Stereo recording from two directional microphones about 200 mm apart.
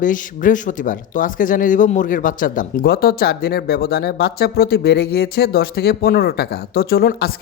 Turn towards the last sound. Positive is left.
turn(degrees=50)  # may be behind; listen again after turning